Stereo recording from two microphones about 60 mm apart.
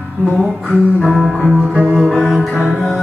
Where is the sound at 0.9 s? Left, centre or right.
Centre.